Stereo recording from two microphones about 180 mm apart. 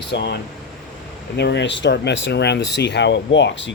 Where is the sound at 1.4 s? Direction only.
75° left (ahead or behind).